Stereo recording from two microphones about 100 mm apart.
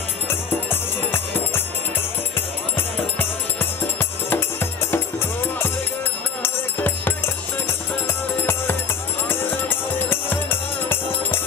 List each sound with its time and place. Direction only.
0.3 s music: 25° left (ahead or behind)
4.3 s music: 20° left (ahead or behind)
9.3 s music: 20° left (ahead or behind)